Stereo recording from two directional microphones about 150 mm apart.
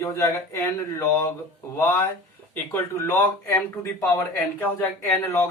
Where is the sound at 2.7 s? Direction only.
15° left (ahead or behind).